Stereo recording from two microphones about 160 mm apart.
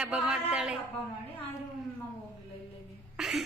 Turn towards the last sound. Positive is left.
turn(degrees=0)  # may be behind; listen again after turning